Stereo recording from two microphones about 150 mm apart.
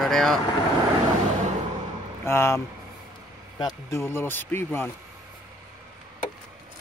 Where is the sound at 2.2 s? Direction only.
15° left (ahead or behind).